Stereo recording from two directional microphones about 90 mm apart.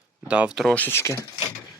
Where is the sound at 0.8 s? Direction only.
25° left (ahead or behind).